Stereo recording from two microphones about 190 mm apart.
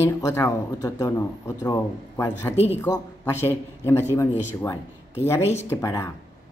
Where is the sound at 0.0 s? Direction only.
15° left (ahead or behind).